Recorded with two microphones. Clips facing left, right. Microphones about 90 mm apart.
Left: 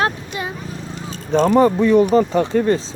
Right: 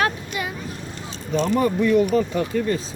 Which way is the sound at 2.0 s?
40° left (ahead or behind).